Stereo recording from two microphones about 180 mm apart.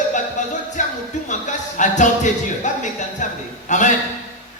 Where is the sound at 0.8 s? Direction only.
45° left (ahead or behind).